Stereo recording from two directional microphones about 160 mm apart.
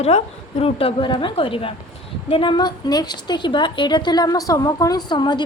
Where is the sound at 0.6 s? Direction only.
35° left (ahead or behind).